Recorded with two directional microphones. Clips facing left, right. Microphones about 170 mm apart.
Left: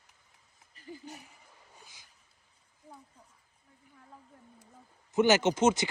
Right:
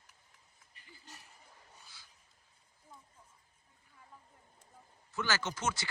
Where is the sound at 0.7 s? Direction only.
40° left (ahead or behind).